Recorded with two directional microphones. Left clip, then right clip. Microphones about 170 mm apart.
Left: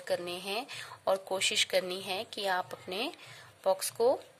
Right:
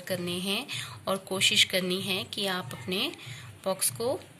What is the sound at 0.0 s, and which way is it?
A woman's voice, 55° left (ahead or behind).